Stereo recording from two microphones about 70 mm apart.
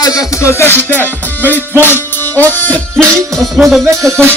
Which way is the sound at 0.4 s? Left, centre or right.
Left.